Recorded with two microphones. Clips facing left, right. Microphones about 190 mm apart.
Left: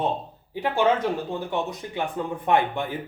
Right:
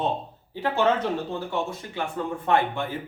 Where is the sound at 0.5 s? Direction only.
15° left (ahead or behind).